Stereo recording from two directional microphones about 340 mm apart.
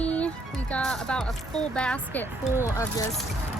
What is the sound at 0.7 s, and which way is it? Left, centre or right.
Speech, centre.